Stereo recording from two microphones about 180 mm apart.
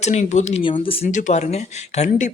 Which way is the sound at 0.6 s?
30° left (ahead or behind).